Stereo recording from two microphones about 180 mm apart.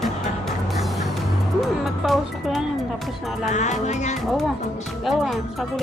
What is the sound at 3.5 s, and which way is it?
Music, 40° left (ahead or behind).